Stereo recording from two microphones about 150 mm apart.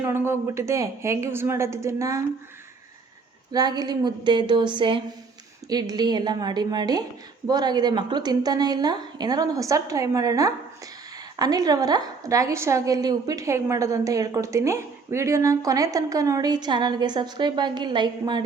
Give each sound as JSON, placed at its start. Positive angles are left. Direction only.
{"t": 0.0, "sound": "a woman's voice", "side_deg": -15}
{"t": 3.5, "sound": "a woman's voice", "side_deg": -25}